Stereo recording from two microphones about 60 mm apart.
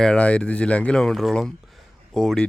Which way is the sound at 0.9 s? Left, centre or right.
Centre.